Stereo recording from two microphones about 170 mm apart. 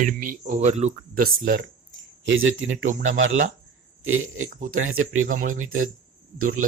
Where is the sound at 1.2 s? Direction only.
80° right.